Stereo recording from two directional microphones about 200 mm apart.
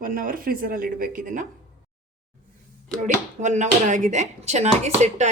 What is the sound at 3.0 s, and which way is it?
Speech, 35° right (ahead or behind).